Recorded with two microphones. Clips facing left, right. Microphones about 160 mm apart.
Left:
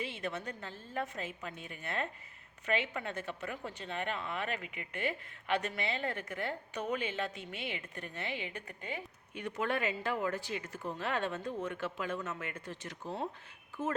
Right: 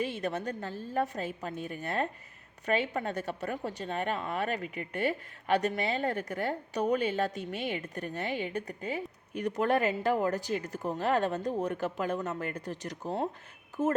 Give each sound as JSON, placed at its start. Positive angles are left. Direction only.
{"t": 0.0, "sound": "a woman's voice", "side_deg": -40}